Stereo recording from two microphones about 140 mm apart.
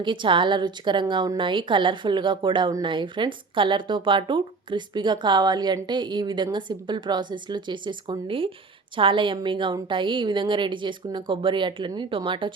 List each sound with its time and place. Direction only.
0.0 s a woman's voice: 35° right (ahead or behind)